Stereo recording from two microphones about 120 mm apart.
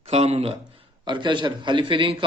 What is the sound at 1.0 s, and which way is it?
A man's voice, 40° right (ahead or behind).